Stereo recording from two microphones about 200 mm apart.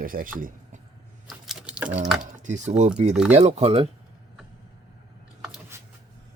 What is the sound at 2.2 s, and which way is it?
Speech, 40° right (ahead or behind).